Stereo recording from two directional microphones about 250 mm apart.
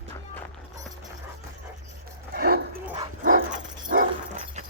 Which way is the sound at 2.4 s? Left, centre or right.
Right.